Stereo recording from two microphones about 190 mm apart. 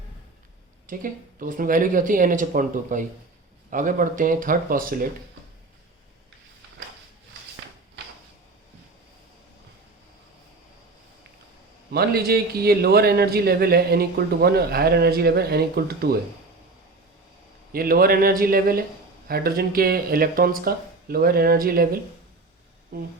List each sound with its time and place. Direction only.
0.9 s speech: 45° right (ahead or behind)
11.9 s a man's voice: 55° right (ahead or behind)
17.7 s speech: 50° right (ahead or behind)